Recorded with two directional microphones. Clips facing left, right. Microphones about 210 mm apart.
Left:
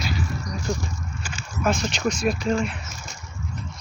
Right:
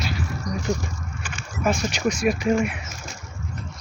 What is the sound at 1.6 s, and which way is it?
Speech, 10° right (ahead or behind).